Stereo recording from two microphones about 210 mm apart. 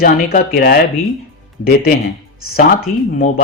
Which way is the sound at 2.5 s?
45° left (ahead or behind).